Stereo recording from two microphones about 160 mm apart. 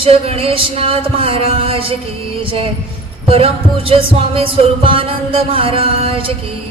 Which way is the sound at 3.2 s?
35° right (ahead or behind).